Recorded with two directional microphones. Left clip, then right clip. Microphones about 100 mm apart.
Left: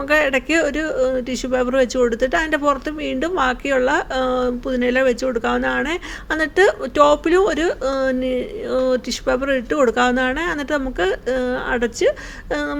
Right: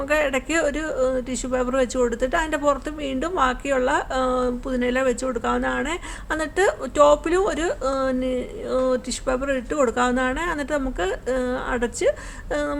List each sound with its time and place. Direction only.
0.1 s speech: 35° left (ahead or behind)
4.8 s speech: 40° left (ahead or behind)